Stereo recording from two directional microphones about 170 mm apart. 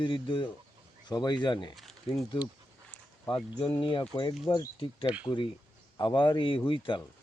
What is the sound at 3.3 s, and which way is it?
Speech, 25° left (ahead or behind).